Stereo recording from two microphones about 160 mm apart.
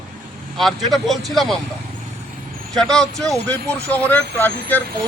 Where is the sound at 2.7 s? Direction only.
5° left (ahead or behind).